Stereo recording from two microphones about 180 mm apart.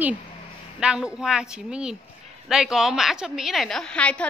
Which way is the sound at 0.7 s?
5° right (ahead or behind).